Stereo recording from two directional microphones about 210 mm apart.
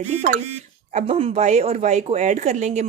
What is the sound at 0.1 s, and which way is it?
Speech, 30° right (ahead or behind).